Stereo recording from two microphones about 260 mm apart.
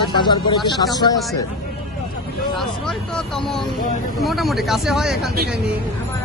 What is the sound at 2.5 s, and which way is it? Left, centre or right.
Speech, centre.